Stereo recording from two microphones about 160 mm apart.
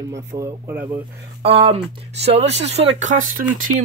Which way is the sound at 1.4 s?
35° right (ahead or behind).